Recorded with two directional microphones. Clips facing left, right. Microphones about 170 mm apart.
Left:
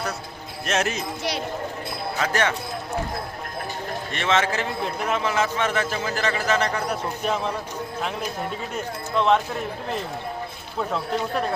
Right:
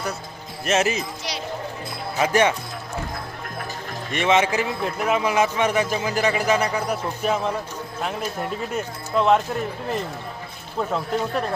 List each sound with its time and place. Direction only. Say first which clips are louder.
0.6 s speech: right 3 dB; 5° right (ahead or behind)
2.1 s a man's voice: right 5 dB; 15° right (ahead or behind)
4.1 s a man's voice: right 4 dB; 15° right (ahead or behind)
10.8 s speech: right 2 dB; centre (ahead or behind)